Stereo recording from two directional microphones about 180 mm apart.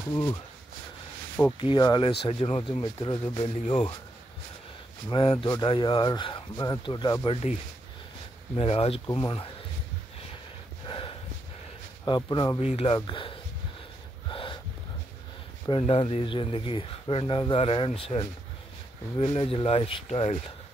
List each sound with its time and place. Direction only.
0.1 s speech: 25° left (ahead or behind)
1.6 s speech: 25° left (ahead or behind)
5.1 s speech: 30° left (ahead or behind)
8.5 s speech: 35° left (ahead or behind)
10.9 s a sound: 30° left (ahead or behind)
12.0 s speech: 20° left (ahead or behind)
12.5 s speech: 35° left (ahead or behind)
14.3 s a sound: 30° left (ahead or behind)
15.7 s speech: 30° left (ahead or behind)